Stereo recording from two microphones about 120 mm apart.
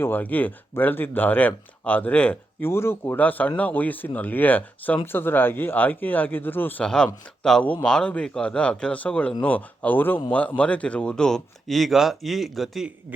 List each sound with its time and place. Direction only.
0.0 s speech: 15° left (ahead or behind)
6.8 s speech: 5° left (ahead or behind)